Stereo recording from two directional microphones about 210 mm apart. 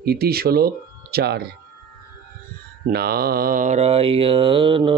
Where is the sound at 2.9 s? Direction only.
50° right (ahead or behind); by 5.0 s 25° right (ahead or behind).